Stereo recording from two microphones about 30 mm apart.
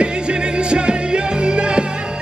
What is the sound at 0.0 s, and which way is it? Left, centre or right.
Music, right.